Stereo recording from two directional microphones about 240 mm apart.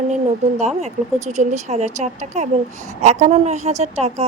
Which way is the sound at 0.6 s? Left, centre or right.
Right.